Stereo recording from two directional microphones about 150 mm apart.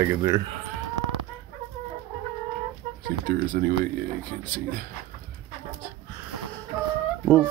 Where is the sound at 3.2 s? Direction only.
65° right (ahead or behind).